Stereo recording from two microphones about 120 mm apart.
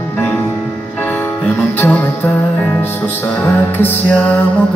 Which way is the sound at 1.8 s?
10° left (ahead or behind).